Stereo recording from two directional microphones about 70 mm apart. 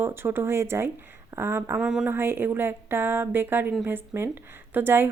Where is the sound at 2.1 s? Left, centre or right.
Right.